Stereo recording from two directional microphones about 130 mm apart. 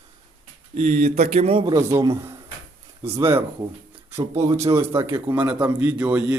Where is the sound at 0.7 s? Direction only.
60° right (ahead or behind).